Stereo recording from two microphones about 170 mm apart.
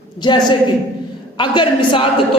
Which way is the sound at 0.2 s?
25° left (ahead or behind).